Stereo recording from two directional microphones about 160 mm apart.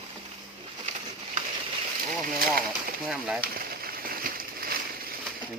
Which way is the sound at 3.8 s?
65° right (ahead or behind).